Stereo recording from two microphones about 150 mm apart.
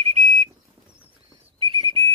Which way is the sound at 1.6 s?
35° right (ahead or behind).